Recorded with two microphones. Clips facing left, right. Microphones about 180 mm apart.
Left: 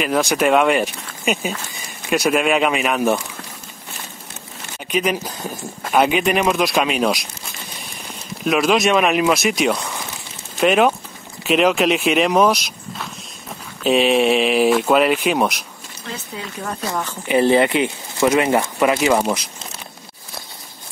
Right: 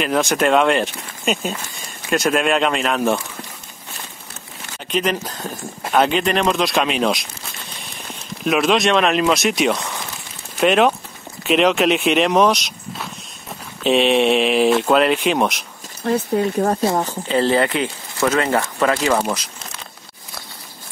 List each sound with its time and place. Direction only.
0.0 s speech: centre (ahead or behind)
4.9 s speech: 5° left (ahead or behind)
8.5 s speech: centre (ahead or behind)
16.0 s speech: 50° right (ahead or behind)
16.8 s speech: 35° right (ahead or behind)
17.3 s speech: 15° left (ahead or behind)